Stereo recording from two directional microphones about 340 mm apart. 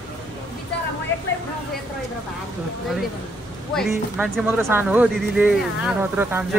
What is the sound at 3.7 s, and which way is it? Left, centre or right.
Speech, centre.